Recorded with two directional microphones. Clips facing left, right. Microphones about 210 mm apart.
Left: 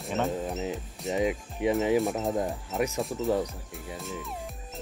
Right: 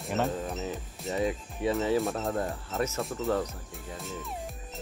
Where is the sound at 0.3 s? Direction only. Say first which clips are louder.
Left 2 dB; 15° left (ahead or behind).